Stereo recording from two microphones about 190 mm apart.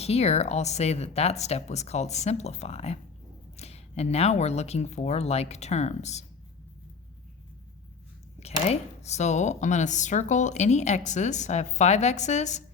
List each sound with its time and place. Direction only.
0.0 s speech: 35° left (ahead or behind)
8.4 s speech: 35° left (ahead or behind)